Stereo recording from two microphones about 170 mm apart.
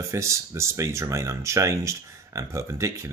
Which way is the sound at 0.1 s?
15° right (ahead or behind).